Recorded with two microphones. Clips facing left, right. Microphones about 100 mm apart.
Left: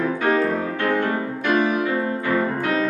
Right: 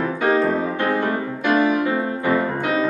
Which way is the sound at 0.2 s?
20° right (ahead or behind).